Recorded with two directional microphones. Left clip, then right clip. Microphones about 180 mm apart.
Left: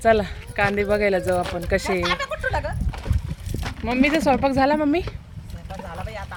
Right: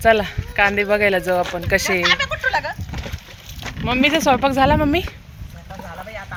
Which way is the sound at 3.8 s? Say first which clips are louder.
Right 3 dB; 5° left (ahead or behind).